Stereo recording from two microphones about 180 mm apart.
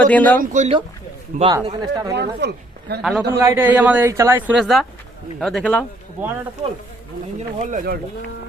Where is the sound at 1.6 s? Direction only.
20° right (ahead or behind).